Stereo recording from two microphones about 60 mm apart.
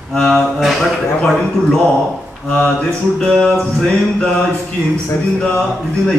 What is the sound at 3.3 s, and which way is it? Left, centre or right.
Music, centre.